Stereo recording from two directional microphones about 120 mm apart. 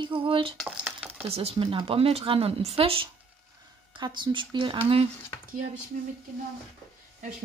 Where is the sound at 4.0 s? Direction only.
40° right (ahead or behind).